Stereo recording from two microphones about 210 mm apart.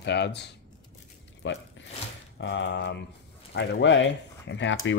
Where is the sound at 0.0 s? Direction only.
55° left (ahead or behind).